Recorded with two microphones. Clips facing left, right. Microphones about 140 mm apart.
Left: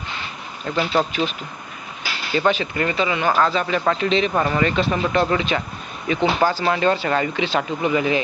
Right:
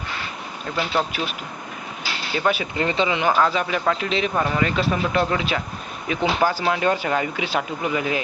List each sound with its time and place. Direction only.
0.9 s speech: 5° right (ahead or behind)
2.3 s speech: 5° right (ahead or behind)
2.7 s speech: 20° right (ahead or behind)
3.3 s speech: 5° right (ahead or behind)